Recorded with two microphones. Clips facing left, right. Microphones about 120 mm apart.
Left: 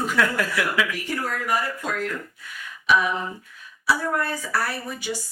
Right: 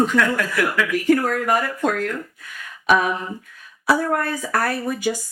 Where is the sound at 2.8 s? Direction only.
55° right (ahead or behind).